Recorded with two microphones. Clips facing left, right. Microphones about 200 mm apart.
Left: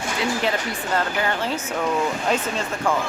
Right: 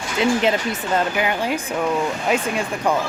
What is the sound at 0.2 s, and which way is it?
Speech, 20° right (ahead or behind).